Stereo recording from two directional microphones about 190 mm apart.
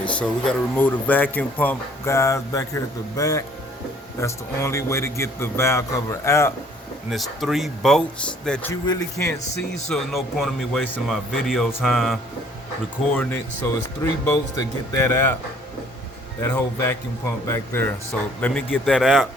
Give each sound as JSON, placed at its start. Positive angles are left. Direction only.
{"t": 0.0, "sound": "speech", "side_deg": 5}
{"t": 7.1, "sound": "a man's voice", "side_deg": 0}
{"t": 8.7, "sound": "speech", "side_deg": 20}
{"t": 9.9, "sound": "a man's voice", "side_deg": 0}
{"t": 14.0, "sound": "speech", "side_deg": 15}
{"t": 16.4, "sound": "a man's voice", "side_deg": 10}